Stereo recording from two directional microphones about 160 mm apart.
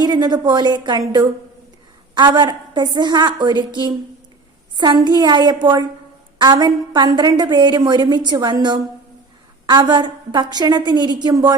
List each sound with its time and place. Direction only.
0.0 s a woman's voice: 25° right (ahead or behind)